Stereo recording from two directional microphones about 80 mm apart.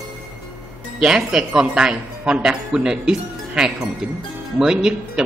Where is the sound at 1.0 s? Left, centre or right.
Centre.